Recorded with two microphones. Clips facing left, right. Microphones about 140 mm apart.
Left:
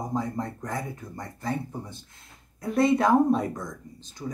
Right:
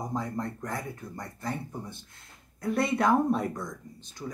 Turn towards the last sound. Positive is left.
turn(degrees=10)  # may be behind; listen again after turning